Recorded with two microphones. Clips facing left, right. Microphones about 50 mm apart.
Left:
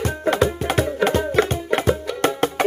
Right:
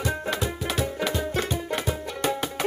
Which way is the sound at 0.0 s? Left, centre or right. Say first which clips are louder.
Left 8 dB; left.